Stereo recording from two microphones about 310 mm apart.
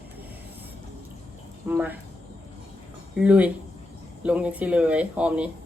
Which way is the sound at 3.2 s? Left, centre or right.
Centre.